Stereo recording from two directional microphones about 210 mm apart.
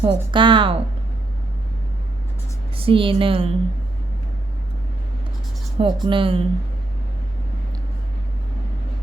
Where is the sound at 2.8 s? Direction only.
25° right (ahead or behind).